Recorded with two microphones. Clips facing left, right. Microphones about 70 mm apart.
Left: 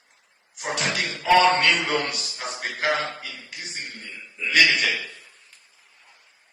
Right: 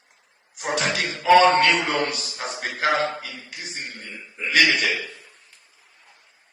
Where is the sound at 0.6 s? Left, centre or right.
Right.